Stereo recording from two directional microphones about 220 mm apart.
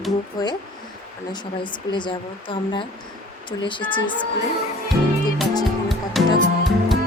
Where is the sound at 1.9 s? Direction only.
20° left (ahead or behind).